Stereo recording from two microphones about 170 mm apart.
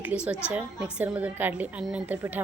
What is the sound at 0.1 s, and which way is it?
A woman's voice, 10° right (ahead or behind).